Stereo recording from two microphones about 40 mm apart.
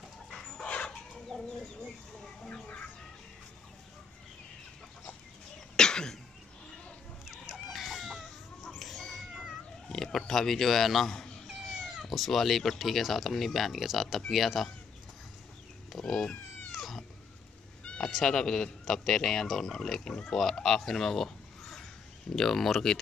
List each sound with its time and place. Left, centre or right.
0.7 s chicken: left
1.3 s chicken: centre
2.4 s chicken: left
5.8 s cough: centre
7.5 s chicken: centre
8.6 s a sound: centre
9.8 s a sound: centre
10.1 s a man's voice: centre
11.9 s speech: centre
16.1 s speech: centre
16.7 s cat: centre
17.9 s cat: left
18.2 s speech: centre
19.7 s speech: centre